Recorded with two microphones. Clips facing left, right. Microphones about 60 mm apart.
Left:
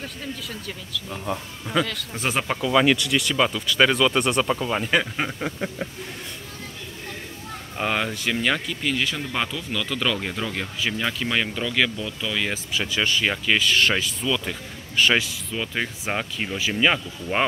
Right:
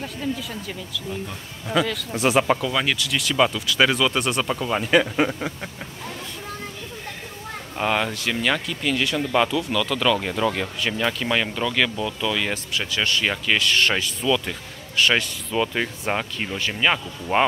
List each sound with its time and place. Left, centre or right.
0.0 s speech: centre
7.7 s speech: centre